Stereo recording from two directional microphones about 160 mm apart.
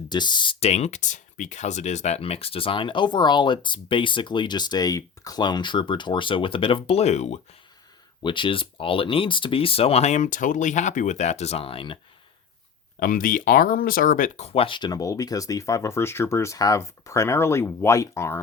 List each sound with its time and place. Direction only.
0.1 s speech: 30° left (ahead or behind); by 7.3 s 45° left (ahead or behind)
8.2 s speech: 30° left (ahead or behind)
13.0 s speech: 60° left (ahead or behind); by 18.3 s 15° left (ahead or behind)